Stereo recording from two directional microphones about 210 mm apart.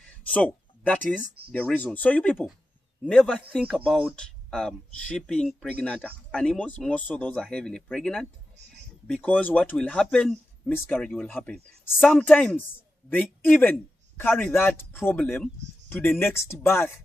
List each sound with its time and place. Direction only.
0.3 s speech: 5° left (ahead or behind)
1.2 s speech: 45° right (ahead or behind)
1.5 s a man's voice: 5° left (ahead or behind)